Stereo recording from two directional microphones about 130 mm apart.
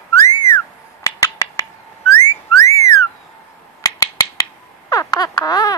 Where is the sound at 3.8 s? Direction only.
25° left (ahead or behind).